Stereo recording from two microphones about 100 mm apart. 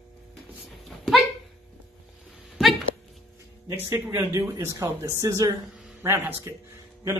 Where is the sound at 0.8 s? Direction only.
Centre (ahead or behind).